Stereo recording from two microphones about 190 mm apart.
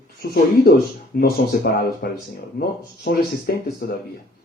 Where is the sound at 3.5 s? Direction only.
55° left (ahead or behind).